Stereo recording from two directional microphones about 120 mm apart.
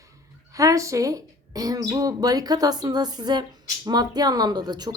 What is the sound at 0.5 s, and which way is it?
A woman's voice, 30° right (ahead or behind).